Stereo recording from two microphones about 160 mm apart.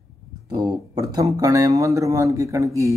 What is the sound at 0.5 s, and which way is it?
Speech, 25° right (ahead or behind).